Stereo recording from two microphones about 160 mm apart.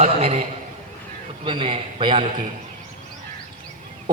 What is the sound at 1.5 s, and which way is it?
Speech, 30° right (ahead or behind).